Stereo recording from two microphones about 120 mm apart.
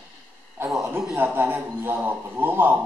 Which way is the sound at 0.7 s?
5° right (ahead or behind).